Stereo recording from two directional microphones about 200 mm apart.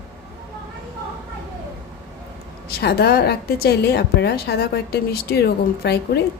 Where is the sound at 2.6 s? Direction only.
50° left (ahead or behind).